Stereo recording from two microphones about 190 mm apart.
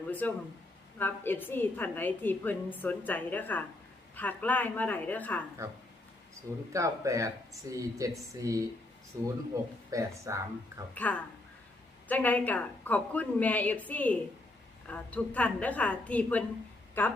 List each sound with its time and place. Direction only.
0.1 s a woman's voice: 10° left (ahead or behind)
5.6 s speech: 15° right (ahead or behind)
10.9 s a woman's voice: 10° left (ahead or behind)